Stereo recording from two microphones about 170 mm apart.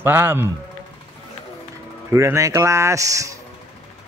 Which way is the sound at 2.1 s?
15° right (ahead or behind).